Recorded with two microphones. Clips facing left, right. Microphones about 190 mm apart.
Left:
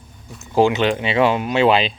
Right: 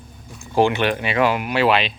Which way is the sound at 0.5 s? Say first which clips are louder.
Left 2 dB; 15° left (ahead or behind).